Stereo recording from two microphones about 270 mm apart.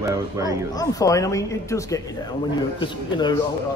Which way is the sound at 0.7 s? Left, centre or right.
Centre.